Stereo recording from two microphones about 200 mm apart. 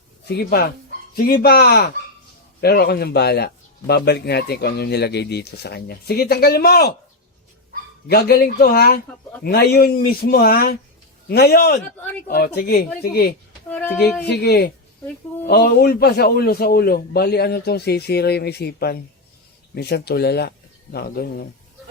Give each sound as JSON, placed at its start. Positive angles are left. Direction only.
{"t": 0.3, "sound": "speech", "side_deg": 50}
{"t": 8.0, "sound": "speech", "side_deg": 50}
{"t": 13.7, "sound": "a woman's voice", "side_deg": 10}
{"t": 14.3, "sound": "speech", "side_deg": 55}